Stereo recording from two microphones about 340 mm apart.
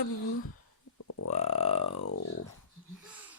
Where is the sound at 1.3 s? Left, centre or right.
Centre.